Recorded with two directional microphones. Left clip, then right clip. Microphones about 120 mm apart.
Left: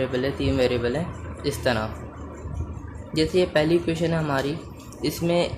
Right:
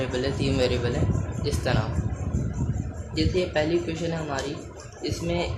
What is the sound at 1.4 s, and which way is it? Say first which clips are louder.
Speech: left 4 dB; 90° left.